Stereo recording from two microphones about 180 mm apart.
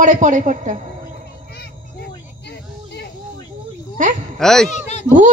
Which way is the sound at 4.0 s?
45° right (ahead or behind).